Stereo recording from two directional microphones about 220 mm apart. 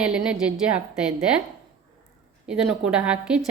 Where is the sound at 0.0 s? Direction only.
5° right (ahead or behind).